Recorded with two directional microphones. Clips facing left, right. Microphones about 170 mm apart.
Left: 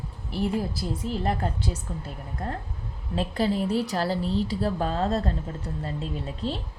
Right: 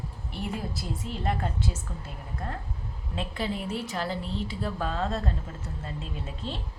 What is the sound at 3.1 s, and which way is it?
A woman's voice, 35° left (ahead or behind).